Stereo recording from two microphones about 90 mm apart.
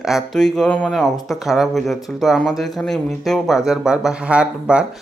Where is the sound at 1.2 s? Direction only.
Centre (ahead or behind).